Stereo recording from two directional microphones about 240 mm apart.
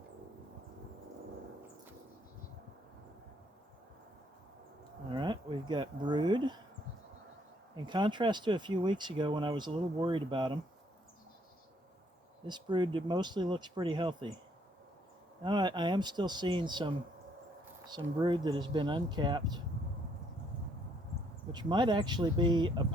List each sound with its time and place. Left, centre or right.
5.1 s speech: centre
7.9 s speech: centre
12.5 s speech: centre
15.4 s speech: centre
21.5 s speech: centre